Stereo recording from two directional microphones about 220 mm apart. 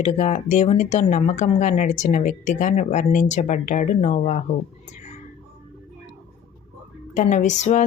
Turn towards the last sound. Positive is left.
turn(degrees=30)  # may be behind; listen again after turning